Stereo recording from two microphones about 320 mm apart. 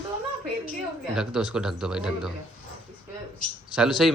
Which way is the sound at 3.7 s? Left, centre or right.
Centre.